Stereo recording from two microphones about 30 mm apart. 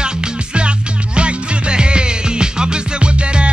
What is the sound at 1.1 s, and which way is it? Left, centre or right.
Music, right.